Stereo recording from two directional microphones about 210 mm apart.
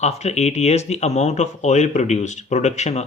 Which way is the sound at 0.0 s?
30° left (ahead or behind).